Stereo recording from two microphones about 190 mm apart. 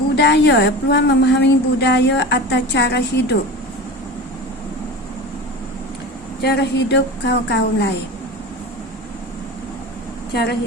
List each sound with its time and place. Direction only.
0.2 s a woman's voice: 65° left (ahead or behind)
6.4 s a woman's voice: 60° left (ahead or behind)
10.3 s a woman's voice: 55° left (ahead or behind)